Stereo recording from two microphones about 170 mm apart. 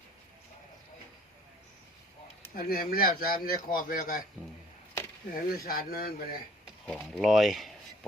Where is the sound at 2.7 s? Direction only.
60° left (ahead or behind).